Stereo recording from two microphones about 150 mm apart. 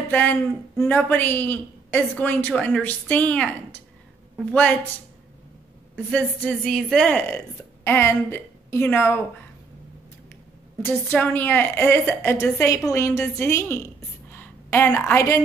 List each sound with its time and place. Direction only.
0.1 s a woman's voice: 10° left (ahead or behind)
4.5 s a woman's voice: 10° left (ahead or behind)
5.9 s a woman's voice: 10° left (ahead or behind)
10.8 s a woman's voice: 15° left (ahead or behind)